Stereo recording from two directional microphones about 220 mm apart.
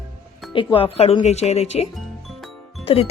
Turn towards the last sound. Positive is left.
turn(degrees=25)  # may be behind; listen again after turning